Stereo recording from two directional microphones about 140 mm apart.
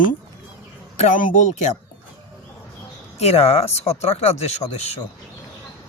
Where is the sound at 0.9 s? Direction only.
60° left (ahead or behind).